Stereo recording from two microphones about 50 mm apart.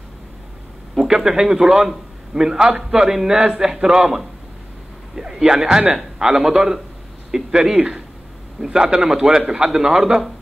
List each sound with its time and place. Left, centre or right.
0.9 s a man's voice: centre